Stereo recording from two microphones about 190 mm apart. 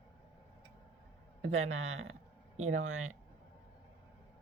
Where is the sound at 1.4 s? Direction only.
90° right.